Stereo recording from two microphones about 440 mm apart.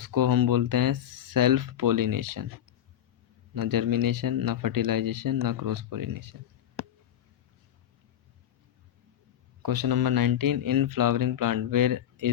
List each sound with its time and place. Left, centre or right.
0.0 s speech: right
3.5 s speech: right
9.6 s speech: right